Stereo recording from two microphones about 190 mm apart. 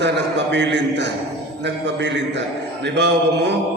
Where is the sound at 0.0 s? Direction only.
70° right (ahead or behind).